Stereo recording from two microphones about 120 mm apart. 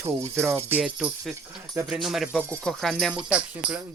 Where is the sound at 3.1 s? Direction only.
10° right (ahead or behind).